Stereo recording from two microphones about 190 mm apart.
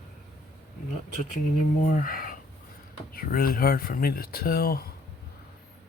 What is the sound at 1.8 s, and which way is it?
Speech, 45° left (ahead or behind).